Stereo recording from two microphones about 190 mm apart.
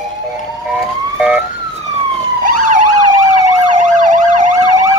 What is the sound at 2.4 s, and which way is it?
Emergency vehicle, 45° right (ahead or behind).